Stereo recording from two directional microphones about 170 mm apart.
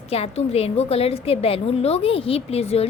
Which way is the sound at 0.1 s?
35° left (ahead or behind).